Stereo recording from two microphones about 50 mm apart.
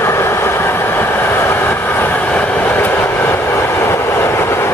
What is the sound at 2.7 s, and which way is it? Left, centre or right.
Train, left.